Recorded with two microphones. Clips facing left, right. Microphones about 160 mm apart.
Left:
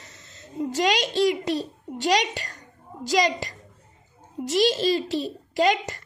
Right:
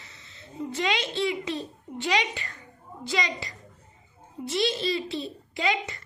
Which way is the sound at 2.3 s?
40° left (ahead or behind).